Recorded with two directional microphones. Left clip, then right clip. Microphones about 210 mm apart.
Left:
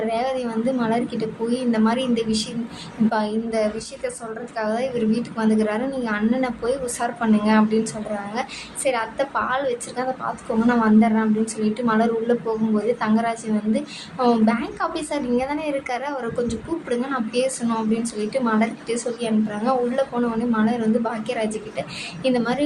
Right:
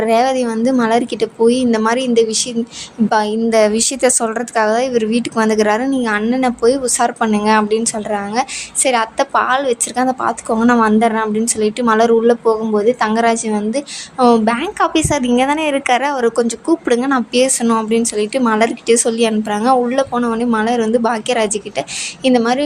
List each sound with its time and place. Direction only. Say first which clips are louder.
0.1 s a woman's voice: right 10 dB; 40° right (ahead or behind)